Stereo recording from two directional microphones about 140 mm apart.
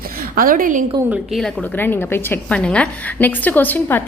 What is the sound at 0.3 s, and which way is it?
Speech, 80° right.